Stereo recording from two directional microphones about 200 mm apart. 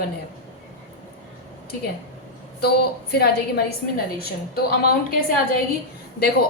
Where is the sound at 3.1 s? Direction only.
55° left (ahead or behind).